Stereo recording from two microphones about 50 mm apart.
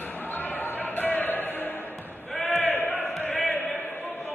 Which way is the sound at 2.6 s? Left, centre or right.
Left.